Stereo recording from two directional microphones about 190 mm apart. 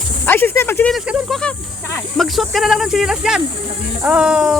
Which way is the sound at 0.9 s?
5° right (ahead or behind).